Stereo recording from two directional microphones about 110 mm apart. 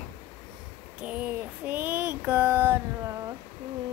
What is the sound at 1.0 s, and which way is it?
Child singing, 15° right (ahead or behind).